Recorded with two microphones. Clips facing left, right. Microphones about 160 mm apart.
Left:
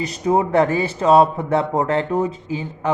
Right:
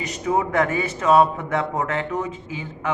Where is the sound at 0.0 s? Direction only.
35° left (ahead or behind).